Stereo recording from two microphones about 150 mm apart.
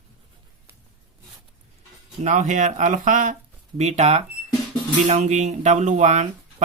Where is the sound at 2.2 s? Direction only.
55° right (ahead or behind).